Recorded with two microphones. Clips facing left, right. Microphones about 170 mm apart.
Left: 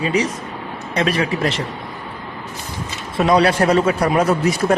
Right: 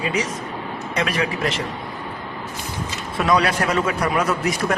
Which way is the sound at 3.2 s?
30° left (ahead or behind).